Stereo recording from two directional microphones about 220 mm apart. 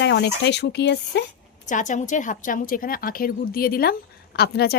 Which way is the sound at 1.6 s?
35° left (ahead or behind).